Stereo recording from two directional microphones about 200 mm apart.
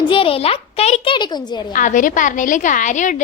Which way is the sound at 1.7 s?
40° left (ahead or behind).